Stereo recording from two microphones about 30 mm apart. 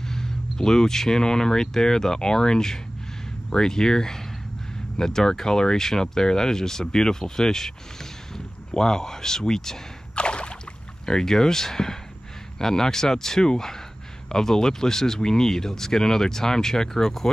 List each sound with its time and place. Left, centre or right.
0.0 s speech: centre
10.1 s a sound: left
11.1 s speech: left